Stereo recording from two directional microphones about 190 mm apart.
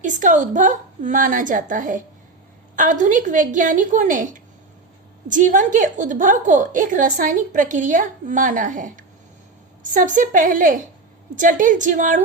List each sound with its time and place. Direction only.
0.0 s a woman's voice: 40° right (ahead or behind)
5.3 s a woman's voice: 45° right (ahead or behind)